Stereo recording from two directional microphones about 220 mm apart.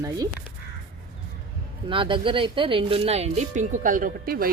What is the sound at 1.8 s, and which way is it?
Speech, 20° right (ahead or behind).